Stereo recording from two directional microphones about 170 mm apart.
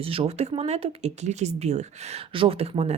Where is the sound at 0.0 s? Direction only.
35° right (ahead or behind).